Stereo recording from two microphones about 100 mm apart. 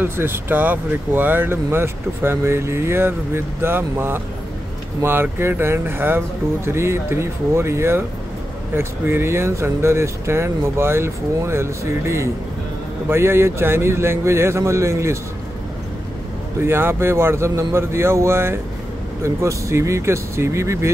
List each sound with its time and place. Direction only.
0.0 s speech: 20° right (ahead or behind)
16.5 s speech: 25° right (ahead or behind)